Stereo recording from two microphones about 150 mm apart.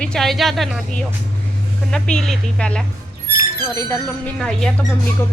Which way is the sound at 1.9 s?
5° left (ahead or behind).